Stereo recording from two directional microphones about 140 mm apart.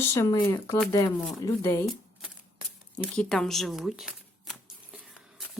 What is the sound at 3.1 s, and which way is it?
Speech, 5° left (ahead or behind).